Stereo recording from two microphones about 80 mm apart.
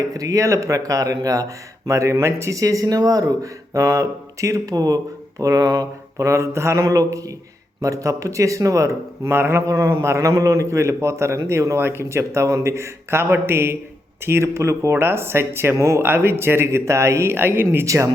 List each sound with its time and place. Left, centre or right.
0.0 s a man's voice: right
17.8 s a man's voice: right